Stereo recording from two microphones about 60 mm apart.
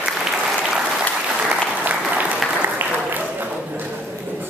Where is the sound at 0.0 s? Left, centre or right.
Centre.